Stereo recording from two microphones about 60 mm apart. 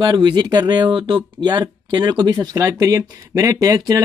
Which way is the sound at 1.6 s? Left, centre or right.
Right.